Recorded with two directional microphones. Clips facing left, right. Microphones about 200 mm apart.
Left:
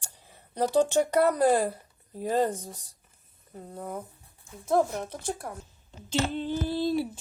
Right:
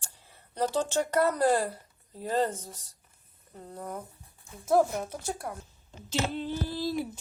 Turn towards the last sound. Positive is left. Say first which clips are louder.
# left 4 dB
turn(degrees=25)  # may be behind; listen again after turning